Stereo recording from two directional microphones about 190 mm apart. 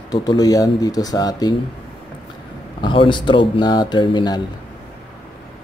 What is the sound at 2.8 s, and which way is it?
Speech, 25° left (ahead or behind).